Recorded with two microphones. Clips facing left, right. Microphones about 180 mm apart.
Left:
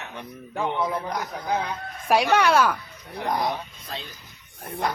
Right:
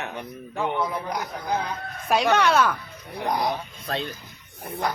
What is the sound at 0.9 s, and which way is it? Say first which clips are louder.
Speech: even; centre (ahead or behind).